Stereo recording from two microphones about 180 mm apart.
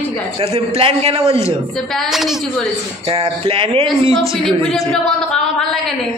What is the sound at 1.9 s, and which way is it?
Speech, centre (ahead or behind).